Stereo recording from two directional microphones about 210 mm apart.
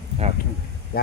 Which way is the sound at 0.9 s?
45° left (ahead or behind).